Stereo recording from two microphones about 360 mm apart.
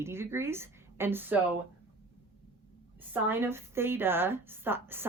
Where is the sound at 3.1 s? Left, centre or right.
Centre.